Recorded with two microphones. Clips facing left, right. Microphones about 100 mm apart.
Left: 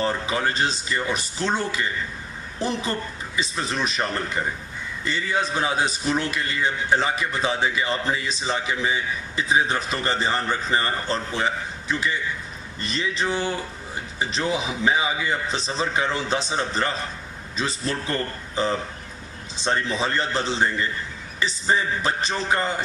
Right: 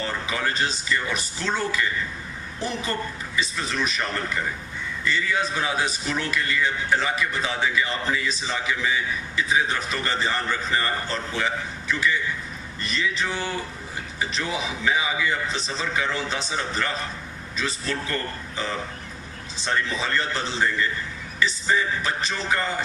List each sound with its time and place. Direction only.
0.0 s a man's voice: 30° left (ahead or behind)
3.3 s a man's voice: 25° left (ahead or behind)
14.8 s a man's voice: 30° left (ahead or behind)